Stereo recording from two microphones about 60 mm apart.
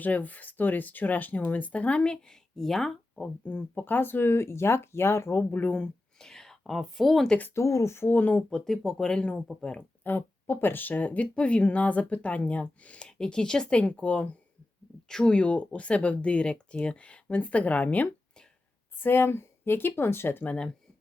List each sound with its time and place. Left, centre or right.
0.0 s speech: left; by 3.2 s centre
3.2 s speech: left
5.4 s speech: left
6.1 s speech: centre
7.5 s speech: left
8.1 s speech: left
8.4 s speech: centre
10.0 s speech: left
19.0 s speech: left